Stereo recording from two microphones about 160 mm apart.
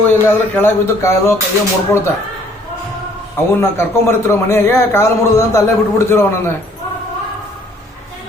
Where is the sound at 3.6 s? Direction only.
15° left (ahead or behind).